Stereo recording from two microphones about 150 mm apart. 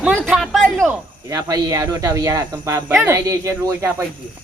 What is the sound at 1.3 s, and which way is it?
Speech, 25° right (ahead or behind).